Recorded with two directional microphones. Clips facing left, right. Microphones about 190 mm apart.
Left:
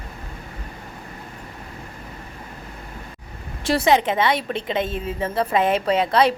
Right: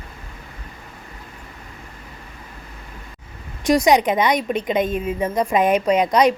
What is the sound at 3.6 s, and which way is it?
A woman's voice, 15° right (ahead or behind).